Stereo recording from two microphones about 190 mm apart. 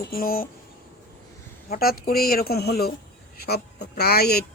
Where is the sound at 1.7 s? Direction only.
50° left (ahead or behind).